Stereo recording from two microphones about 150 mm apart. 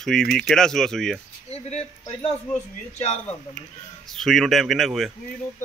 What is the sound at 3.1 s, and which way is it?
A man's voice, 5° left (ahead or behind).